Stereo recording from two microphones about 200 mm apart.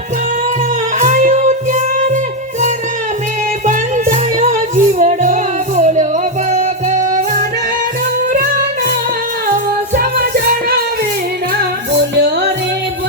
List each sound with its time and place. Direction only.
0.9 s music: 35° right (ahead or behind)
3.7 s music: 40° right (ahead or behind)
9.9 s music: 45° right (ahead or behind)